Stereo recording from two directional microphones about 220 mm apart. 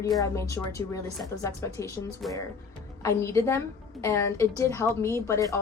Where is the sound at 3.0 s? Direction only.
15° left (ahead or behind).